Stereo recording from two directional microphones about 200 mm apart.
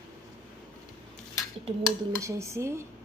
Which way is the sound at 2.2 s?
15° right (ahead or behind).